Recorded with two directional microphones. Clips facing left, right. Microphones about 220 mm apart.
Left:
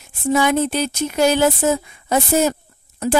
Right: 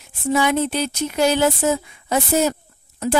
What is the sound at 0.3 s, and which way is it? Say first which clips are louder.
A woman's voice: left 2 dB; 45° left (ahead or behind).